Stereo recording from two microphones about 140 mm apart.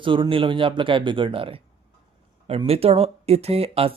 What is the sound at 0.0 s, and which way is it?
Speech, 35° right (ahead or behind).